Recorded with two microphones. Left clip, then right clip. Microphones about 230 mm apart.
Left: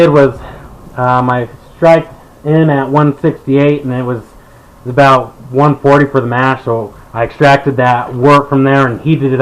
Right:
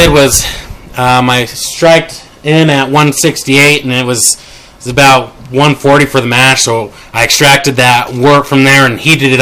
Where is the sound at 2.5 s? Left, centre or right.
Right.